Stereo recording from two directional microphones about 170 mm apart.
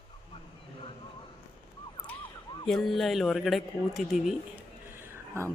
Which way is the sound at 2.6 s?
Centre (ahead or behind).